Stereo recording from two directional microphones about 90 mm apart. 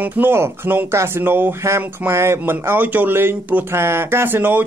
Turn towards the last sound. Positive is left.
turn(degrees=-25)  # may be behind; listen again after turning